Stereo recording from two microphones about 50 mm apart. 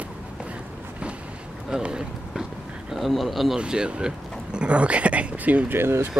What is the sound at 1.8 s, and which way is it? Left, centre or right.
Run, centre.